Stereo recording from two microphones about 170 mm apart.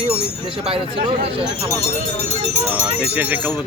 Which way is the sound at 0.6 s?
35° right (ahead or behind).